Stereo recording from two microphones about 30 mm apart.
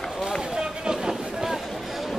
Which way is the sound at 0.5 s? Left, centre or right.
Centre.